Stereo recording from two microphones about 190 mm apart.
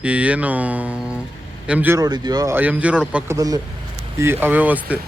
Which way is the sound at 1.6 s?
10° right (ahead or behind).